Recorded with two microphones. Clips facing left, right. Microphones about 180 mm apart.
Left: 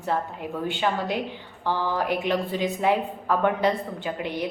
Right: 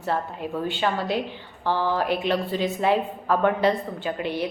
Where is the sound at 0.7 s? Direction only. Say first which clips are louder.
Even; 15° left (ahead or behind).